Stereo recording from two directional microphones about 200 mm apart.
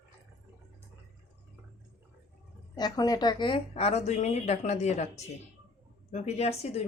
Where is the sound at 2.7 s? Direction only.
20° left (ahead or behind).